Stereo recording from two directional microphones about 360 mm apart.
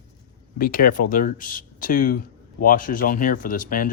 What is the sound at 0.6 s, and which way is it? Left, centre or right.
Speech, left.